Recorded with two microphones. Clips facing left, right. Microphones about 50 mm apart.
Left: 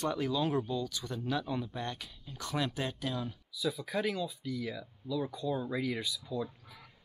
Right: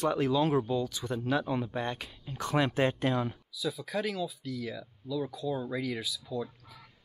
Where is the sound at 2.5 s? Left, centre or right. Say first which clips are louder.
Right 7 dB; right.